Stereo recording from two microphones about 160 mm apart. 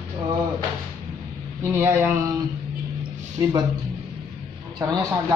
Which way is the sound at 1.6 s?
15° right (ahead or behind).